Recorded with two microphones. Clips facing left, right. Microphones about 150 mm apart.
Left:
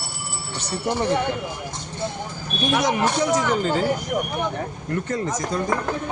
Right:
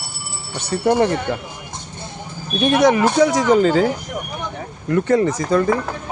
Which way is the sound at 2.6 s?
60° right (ahead or behind).